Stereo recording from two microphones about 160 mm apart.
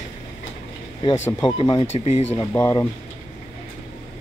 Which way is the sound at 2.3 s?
15° left (ahead or behind).